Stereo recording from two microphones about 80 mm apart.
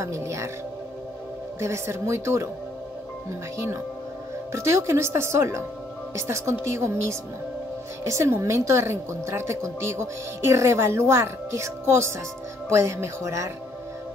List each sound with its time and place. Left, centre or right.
0.0 s a woman's voice: right
1.6 s a woman's voice: right
3.5 s a woman's voice: right